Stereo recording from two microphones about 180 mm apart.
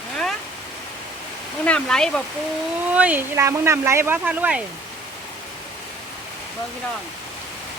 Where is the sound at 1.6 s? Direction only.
5° left (ahead or behind).